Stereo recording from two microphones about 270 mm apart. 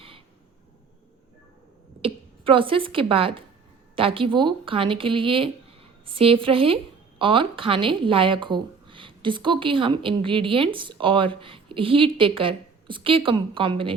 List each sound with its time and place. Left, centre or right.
2.0 s speech: centre